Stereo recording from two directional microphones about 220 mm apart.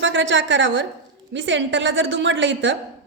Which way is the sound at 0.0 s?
55° right (ahead or behind).